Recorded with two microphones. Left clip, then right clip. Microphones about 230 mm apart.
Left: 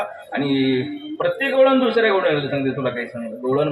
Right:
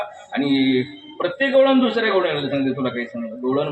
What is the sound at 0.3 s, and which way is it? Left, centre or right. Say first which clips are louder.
A man's voice: right 1 dB; right.